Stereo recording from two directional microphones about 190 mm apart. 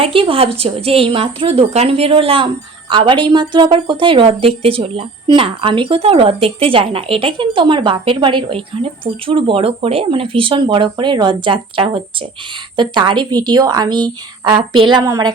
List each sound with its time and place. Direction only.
0.0 s a woman's voice: 30° right (ahead or behind)